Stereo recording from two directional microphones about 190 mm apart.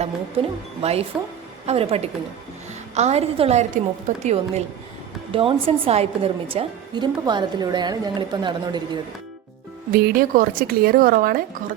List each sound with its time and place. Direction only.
0.0 s a woman's voice: 35° right (ahead or behind)
9.9 s speech: 50° right (ahead or behind)